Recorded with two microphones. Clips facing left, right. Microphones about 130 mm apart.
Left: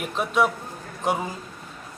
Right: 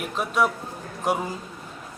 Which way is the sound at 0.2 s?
Centre (ahead or behind).